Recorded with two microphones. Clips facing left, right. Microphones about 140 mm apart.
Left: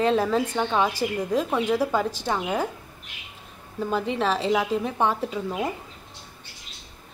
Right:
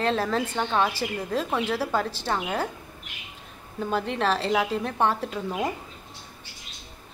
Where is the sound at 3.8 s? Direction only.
5° left (ahead or behind).